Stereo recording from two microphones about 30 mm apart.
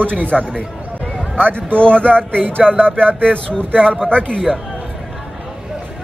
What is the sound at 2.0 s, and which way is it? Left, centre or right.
Speech, left.